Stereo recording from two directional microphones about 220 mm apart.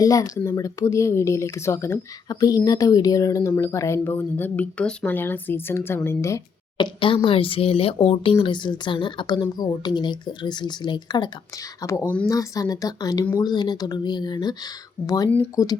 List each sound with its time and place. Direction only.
0.0 s speech: 15° left (ahead or behind)